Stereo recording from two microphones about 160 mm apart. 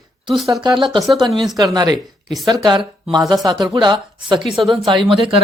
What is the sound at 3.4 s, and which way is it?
Speech, 25° right (ahead or behind).